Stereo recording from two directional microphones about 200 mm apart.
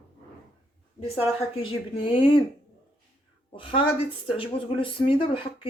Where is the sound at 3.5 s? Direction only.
25° left (ahead or behind).